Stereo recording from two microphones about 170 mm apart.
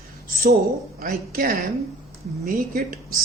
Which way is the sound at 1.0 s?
60° right (ahead or behind).